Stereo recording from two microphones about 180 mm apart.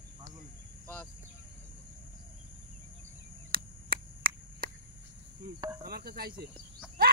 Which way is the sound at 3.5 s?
55° right (ahead or behind).